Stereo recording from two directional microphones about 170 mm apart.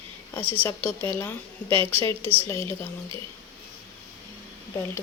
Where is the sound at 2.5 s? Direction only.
15° left (ahead or behind).